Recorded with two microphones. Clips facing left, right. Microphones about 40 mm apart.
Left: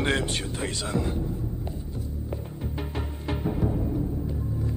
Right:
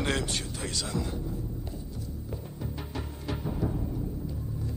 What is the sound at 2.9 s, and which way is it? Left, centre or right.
Music, left.